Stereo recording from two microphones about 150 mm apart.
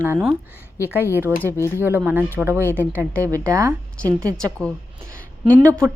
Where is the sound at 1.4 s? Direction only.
15° left (ahead or behind).